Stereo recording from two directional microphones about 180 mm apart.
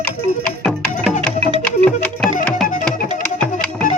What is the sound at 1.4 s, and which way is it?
Music, 30° right (ahead or behind).